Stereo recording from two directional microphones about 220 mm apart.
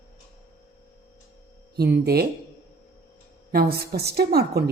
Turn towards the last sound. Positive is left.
turn(degrees=-45)  # may be behind; listen again after turning